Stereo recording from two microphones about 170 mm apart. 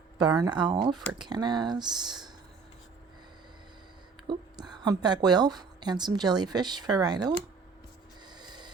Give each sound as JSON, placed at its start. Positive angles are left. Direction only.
{"t": 0.2, "sound": "a woman's voice", "side_deg": -20}
{"t": 4.3, "sound": "a woman's voice", "side_deg": -25}
{"t": 8.3, "sound": "snort", "side_deg": -25}